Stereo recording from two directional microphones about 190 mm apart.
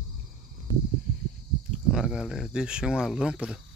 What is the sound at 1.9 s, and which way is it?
Speech, 5° right (ahead or behind).